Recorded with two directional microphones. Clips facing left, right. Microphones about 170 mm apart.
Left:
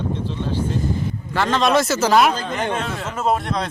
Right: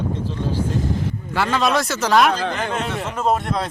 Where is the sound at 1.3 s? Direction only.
10° right (ahead or behind).